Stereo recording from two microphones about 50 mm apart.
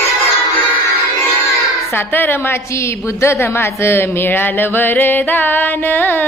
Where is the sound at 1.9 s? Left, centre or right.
Left.